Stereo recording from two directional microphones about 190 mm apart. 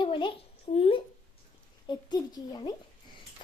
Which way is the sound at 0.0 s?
25° left (ahead or behind).